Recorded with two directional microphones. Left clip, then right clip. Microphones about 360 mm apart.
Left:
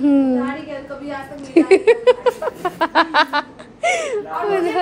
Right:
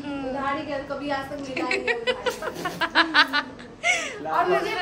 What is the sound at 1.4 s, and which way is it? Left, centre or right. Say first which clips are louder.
Speech: left 18 dB; centre.